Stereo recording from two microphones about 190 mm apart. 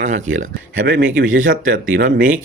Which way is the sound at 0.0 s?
40° right (ahead or behind).